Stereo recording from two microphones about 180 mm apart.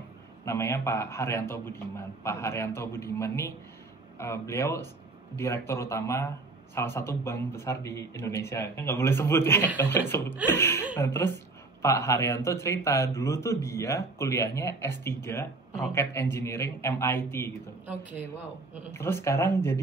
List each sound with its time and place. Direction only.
0.5 s a man's voice: 15° left (ahead or behind)
18.9 s a man's voice: 15° left (ahead or behind)